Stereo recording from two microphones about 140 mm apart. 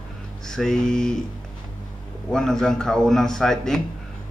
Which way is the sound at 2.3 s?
5° left (ahead or behind).